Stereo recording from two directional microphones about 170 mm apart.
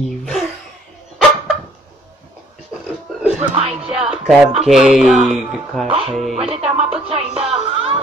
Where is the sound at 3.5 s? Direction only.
35° right (ahead or behind).